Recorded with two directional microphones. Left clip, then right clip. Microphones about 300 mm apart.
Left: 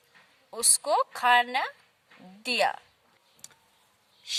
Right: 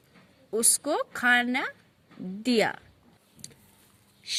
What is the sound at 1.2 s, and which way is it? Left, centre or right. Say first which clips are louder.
Speech: right 1 dB; centre.